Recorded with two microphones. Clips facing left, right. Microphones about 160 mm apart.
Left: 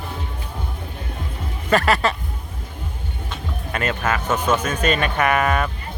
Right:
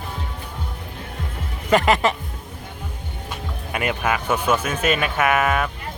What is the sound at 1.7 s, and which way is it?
Speech, 15° right (ahead or behind).